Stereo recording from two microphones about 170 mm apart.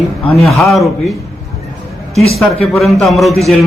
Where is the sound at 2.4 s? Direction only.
Centre (ahead or behind).